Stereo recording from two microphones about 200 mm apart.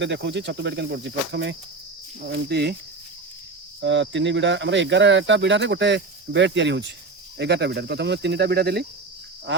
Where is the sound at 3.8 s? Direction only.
65° right (ahead or behind).